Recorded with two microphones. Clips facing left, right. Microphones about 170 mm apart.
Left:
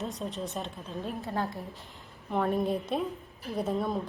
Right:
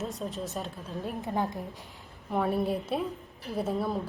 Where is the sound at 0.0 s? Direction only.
Centre (ahead or behind).